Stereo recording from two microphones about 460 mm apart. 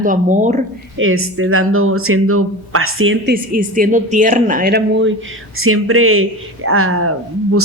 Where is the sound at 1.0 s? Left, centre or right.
Right.